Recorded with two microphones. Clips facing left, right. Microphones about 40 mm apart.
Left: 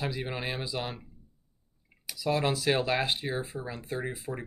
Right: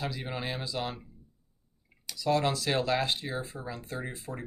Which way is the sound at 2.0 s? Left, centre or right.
Centre.